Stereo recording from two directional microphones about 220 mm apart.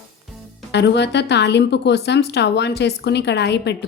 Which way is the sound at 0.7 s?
50° left (ahead or behind).